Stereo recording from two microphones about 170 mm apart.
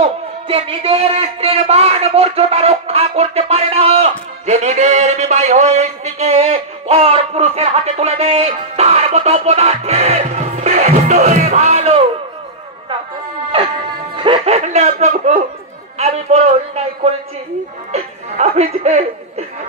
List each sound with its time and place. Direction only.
0.0 s speech: 35° right (ahead or behind)
14.1 s speech: 30° right (ahead or behind)